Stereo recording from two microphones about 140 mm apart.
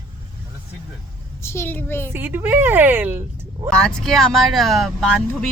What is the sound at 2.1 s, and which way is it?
Speech, 15° right (ahead or behind).